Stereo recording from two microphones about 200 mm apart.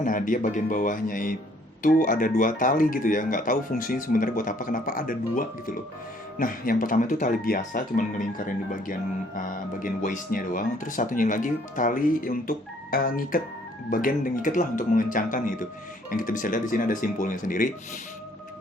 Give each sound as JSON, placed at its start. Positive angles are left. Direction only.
{"t": 0.0, "sound": "speech", "side_deg": 40}